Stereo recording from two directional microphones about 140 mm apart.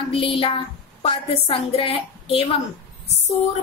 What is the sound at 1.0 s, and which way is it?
A woman's voice, 45° left (ahead or behind).